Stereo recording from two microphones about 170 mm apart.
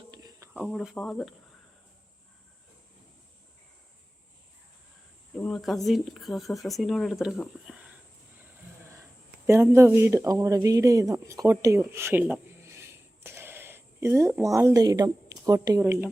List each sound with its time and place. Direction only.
0.1 s cricket: 20° right (ahead or behind)
0.5 s speech: centre (ahead or behind)
5.4 s speech: 5° left (ahead or behind)
9.5 s speech: 15° right (ahead or behind)